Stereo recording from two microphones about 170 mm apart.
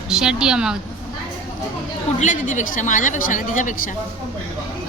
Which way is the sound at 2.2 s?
50° left (ahead or behind).